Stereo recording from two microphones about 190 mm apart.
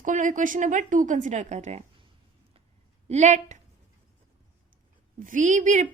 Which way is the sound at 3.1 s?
40° right (ahead or behind).